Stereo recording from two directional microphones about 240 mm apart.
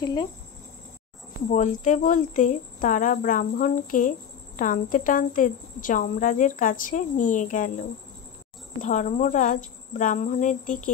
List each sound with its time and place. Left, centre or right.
0.0 s speech: centre
1.5 s speech: left
8.8 s speech: left